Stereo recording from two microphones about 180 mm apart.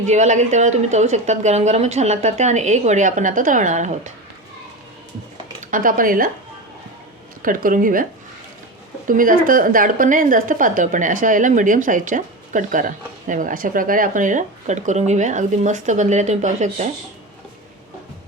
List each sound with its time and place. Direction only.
0.0 s a woman's voice: 40° right (ahead or behind)
5.7 s a woman's voice: 50° right (ahead or behind)
7.4 s a woman's voice: 50° right (ahead or behind)
9.0 s a woman's voice: 50° right (ahead or behind)